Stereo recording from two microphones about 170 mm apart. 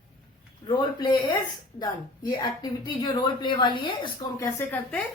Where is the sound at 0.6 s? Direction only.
25° left (ahead or behind).